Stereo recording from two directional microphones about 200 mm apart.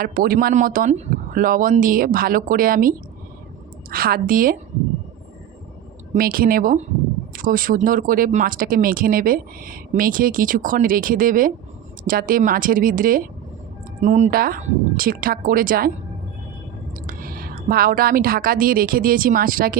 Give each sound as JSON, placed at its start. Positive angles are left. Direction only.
{"t": 0.0, "sound": "speech", "side_deg": -45}
{"t": 6.1, "sound": "speech", "side_deg": -45}
{"t": 17.1, "sound": "a woman's voice", "side_deg": -45}